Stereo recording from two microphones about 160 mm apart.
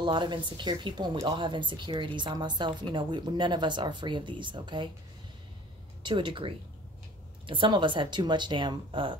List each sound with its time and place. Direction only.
0.0 s speech: 30° right (ahead or behind)
6.0 s speech: 30° right (ahead or behind)